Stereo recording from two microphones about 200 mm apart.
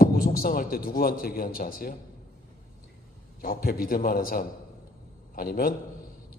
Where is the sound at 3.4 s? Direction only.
45° left (ahead or behind).